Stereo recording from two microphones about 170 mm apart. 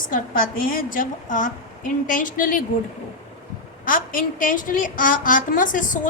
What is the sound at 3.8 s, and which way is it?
A woman's voice, 55° left (ahead or behind).